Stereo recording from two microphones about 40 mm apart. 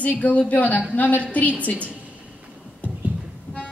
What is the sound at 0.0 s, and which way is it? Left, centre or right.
A woman's voice, left.